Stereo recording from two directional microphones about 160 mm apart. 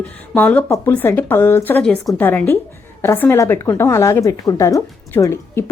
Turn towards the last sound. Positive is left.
turn(degrees=15)  # may be behind; listen again after turning